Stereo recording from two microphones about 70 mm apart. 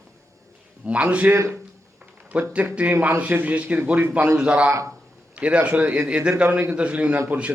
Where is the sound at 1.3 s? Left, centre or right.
Right.